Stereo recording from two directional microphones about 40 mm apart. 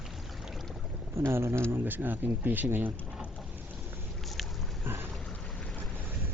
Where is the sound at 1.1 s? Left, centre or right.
Right.